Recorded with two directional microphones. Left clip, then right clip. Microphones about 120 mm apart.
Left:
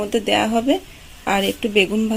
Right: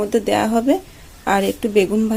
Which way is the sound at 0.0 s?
10° right (ahead or behind).